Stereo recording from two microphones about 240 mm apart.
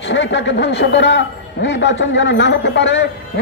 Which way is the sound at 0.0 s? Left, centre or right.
Left.